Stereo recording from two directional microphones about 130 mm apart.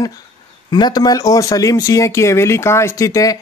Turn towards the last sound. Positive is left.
turn(degrees=25)  # may be behind; listen again after turning